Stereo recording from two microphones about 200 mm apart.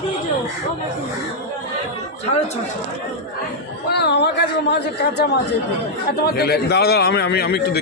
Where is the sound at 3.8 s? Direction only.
55° left (ahead or behind).